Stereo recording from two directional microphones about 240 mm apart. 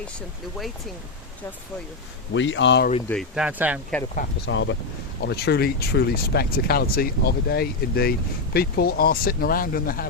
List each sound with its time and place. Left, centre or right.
2.3 s speech: left
3.1 s speech: centre
4.4 s speech: left